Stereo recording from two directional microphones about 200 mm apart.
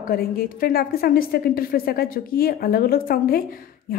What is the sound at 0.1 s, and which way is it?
A woman's voice, 50° left (ahead or behind).